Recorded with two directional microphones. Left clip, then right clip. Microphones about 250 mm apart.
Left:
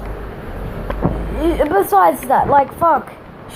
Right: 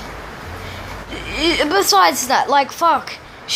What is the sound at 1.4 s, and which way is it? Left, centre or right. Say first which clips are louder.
A woman's voice: even; right.